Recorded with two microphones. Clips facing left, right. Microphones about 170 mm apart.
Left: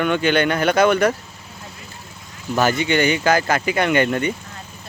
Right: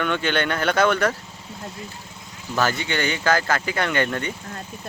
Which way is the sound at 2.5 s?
15° left (ahead or behind).